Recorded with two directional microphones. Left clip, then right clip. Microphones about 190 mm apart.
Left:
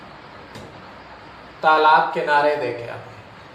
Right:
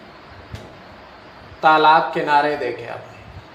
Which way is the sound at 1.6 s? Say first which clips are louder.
Right 1 dB; 55° right (ahead or behind).